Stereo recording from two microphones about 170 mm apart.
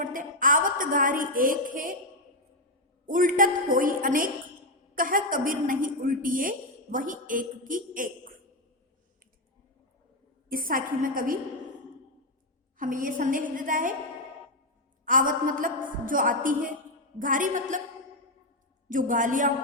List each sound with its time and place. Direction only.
0.0 s a woman's voice: 50° right (ahead or behind)
3.1 s a woman's voice: 50° right (ahead or behind)
10.5 s a woman's voice: 55° right (ahead or behind)
12.7 s a woman's voice: 55° right (ahead or behind)
15.0 s a woman's voice: 55° right (ahead or behind)
18.9 s a woman's voice: 50° right (ahead or behind)